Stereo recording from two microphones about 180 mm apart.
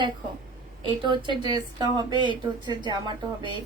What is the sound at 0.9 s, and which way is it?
A woman's voice, 25° right (ahead or behind).